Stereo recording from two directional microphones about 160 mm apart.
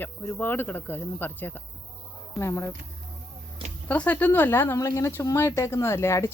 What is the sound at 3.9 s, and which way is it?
Speech, 10° left (ahead or behind).